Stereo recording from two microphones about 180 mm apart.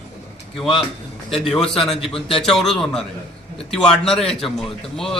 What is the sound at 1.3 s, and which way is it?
A man's voice, 5° left (ahead or behind).